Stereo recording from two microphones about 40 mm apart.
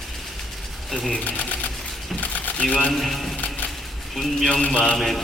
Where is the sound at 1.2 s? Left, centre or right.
Left.